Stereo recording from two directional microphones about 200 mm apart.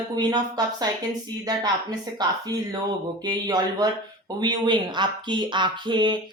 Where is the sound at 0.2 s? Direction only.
20° right (ahead or behind).